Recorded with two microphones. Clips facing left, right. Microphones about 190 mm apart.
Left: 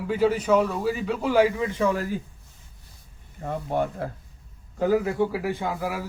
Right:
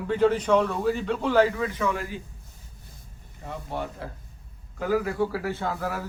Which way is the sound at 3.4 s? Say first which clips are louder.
Left 7 dB; 50° left (ahead or behind).